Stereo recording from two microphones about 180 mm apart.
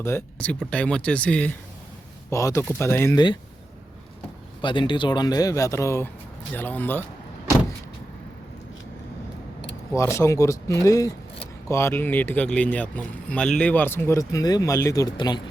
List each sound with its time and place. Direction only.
0.0 s speech: 15° left (ahead or behind)
4.6 s speech: 25° left (ahead or behind); by 7.0 s 10° left (ahead or behind)
9.9 s speech: 15° left (ahead or behind)